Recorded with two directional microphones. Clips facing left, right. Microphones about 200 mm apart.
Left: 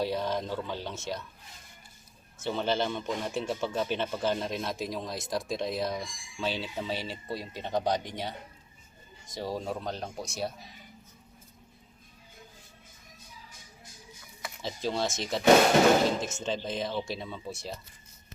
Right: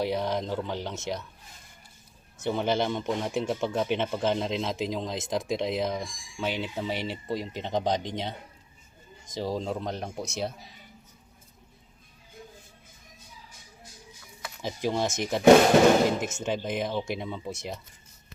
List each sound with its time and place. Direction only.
0.0 s speech: 15° right (ahead or behind)
2.4 s speech: 15° right (ahead or behind)
14.6 s speech: 15° right (ahead or behind)
16.4 s speech: 15° right (ahead or behind)